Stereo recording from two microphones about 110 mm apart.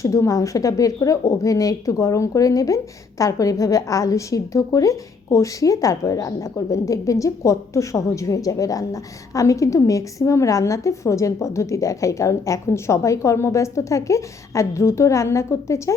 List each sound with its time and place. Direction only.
0.0 s speech: 30° left (ahead or behind)